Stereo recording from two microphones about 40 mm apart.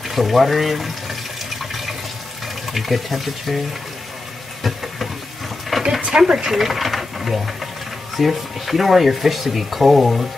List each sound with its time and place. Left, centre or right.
0.1 s speech: centre
1.6 s water: centre
2.7 s speech: centre
4.6 s a sound: centre
5.9 s speech: right
6.5 s sewing machine: centre
8.2 s speech: centre